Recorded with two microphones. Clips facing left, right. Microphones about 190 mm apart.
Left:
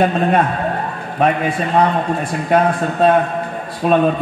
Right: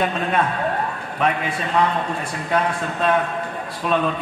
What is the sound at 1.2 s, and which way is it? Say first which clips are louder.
A man's voice: left 6 dB; 40° left (ahead or behind).